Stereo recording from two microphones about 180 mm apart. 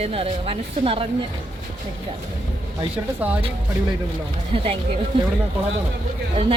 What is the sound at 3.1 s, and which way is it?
Speech, 10° right (ahead or behind).